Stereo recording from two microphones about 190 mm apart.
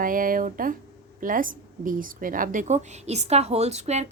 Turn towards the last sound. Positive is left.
turn(degrees=-35)  # may be behind; listen again after turning